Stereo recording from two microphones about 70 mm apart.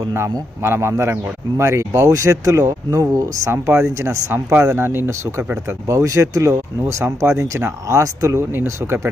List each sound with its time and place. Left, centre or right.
0.1 s a man's voice: right
3.5 s a man's voice: right
8.4 s speech: right